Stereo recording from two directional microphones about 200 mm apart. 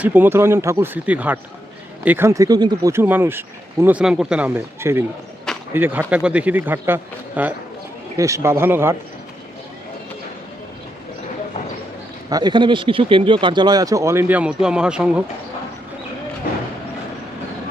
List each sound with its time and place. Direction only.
0.0 s speech: 10° right (ahead or behind)
12.3 s speech: 20° right (ahead or behind); by 15.2 s 5° right (ahead or behind)